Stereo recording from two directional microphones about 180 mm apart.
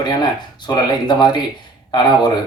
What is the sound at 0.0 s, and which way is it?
Speech, 25° left (ahead or behind).